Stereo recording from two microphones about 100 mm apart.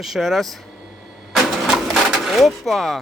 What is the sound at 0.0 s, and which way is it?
Speech, centre (ahead or behind).